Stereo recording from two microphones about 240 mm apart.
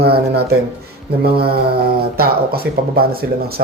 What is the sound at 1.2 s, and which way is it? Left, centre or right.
Speech, right.